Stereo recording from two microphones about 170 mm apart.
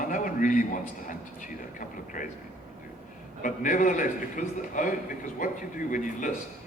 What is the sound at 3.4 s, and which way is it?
A man's voice, 50° left (ahead or behind).